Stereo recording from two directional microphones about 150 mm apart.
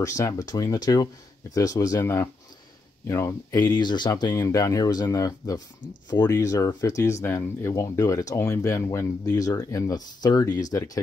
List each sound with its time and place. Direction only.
0.0 s speech: 20° left (ahead or behind)